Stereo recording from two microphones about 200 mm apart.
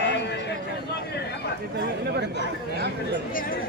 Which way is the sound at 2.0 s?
55° right (ahead or behind).